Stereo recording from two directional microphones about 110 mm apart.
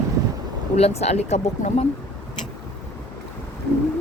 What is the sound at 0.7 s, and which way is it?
A woman's voice, 70° left (ahead or behind).